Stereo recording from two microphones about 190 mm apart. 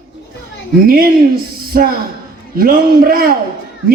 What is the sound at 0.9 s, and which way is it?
A man's voice, 50° right (ahead or behind).